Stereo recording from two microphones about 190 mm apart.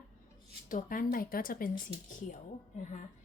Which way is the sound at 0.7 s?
45° left (ahead or behind).